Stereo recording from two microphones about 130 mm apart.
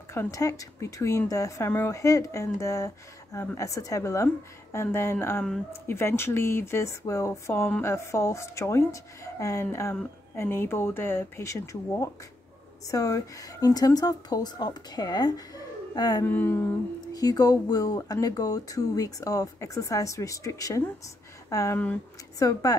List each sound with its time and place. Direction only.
0.1 s speech: 20° left (ahead or behind)
16.3 s speech: 15° left (ahead or behind)
17.1 s speech: 30° left (ahead or behind)